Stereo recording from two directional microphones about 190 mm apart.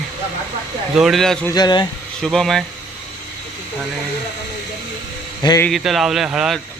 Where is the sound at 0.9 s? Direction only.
Centre (ahead or behind).